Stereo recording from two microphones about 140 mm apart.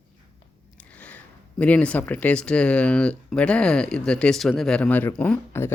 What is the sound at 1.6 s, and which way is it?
Speech, 10° left (ahead or behind).